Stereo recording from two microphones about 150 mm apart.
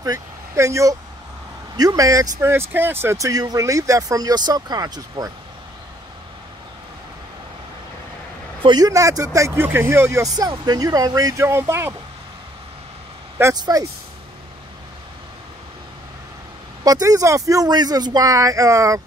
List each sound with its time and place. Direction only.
0.0 s speech: 20° right (ahead or behind)
8.6 s speech: 25° right (ahead or behind)
13.4 s speech: 20° right (ahead or behind)
16.8 s speech: 25° right (ahead or behind)